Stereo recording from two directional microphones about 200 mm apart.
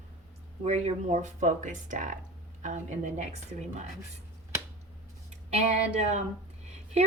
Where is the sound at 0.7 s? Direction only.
35° right (ahead or behind).